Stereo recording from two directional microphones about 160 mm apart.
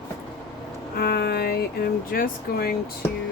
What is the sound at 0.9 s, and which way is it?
Music, 75° left (ahead or behind).